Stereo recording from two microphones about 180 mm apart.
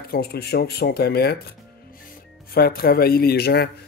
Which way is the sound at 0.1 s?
60° left (ahead or behind).